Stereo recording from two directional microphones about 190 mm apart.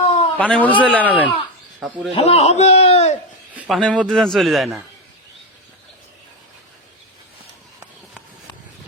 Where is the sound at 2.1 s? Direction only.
35° left (ahead or behind).